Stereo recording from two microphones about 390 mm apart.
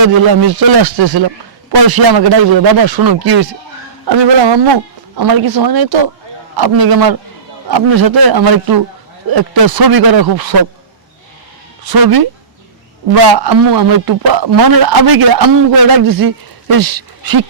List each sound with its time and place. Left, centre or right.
0.4 s a man's voice: right
4.0 s speech: right
5.1 s a man's voice: right
11.9 s a man's voice: right